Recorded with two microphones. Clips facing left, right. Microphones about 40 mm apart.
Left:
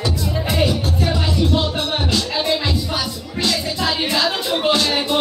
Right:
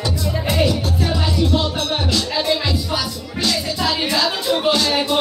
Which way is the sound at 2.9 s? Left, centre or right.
Centre.